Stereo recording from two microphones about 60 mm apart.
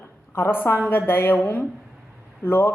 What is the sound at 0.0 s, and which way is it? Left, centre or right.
A woman's voice, left.